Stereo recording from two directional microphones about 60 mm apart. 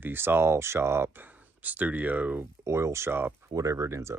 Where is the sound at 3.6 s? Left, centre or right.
Right.